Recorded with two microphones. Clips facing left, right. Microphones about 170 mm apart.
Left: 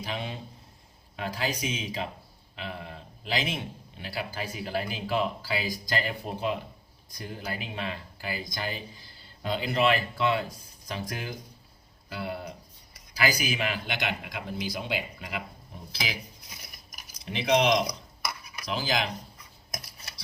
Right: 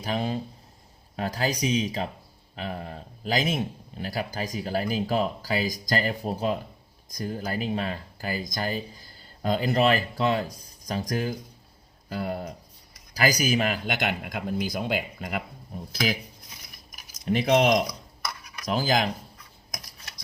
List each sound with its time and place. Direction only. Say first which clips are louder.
0.0 s a man's voice: right 7 dB; 40° right (ahead or behind)
17.2 s a man's voice: right 3 dB; 45° right (ahead or behind)